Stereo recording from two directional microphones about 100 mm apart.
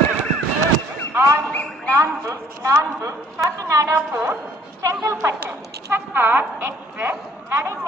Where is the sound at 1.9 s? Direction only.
30° right (ahead or behind).